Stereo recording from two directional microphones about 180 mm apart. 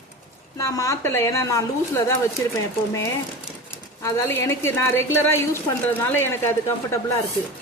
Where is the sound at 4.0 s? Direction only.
15° left (ahead or behind).